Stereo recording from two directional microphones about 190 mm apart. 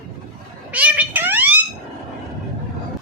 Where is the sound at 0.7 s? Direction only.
10° right (ahead or behind).